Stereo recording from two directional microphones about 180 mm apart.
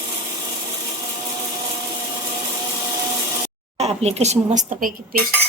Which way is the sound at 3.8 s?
35° right (ahead or behind).